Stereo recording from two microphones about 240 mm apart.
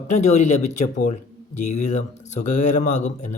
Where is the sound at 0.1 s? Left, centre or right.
Left.